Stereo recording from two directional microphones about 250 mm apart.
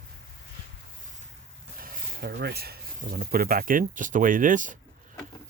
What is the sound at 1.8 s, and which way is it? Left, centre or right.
Speech, right.